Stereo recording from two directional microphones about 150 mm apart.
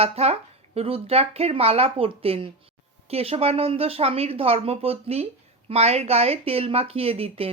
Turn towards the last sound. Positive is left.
turn(degrees=-40)  # may be behind; listen again after turning